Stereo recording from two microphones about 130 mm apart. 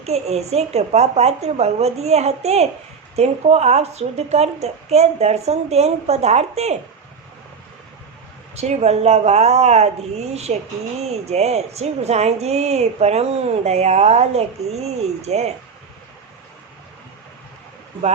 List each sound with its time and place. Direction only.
0.0 s a woman's voice: 55° right (ahead or behind)
8.5 s a woman's voice: 55° right (ahead or behind)